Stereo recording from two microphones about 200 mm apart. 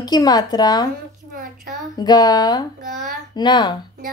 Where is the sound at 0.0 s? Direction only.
20° left (ahead or behind).